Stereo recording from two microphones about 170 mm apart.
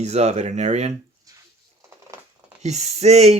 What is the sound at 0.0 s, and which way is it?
Speech, 40° right (ahead or behind).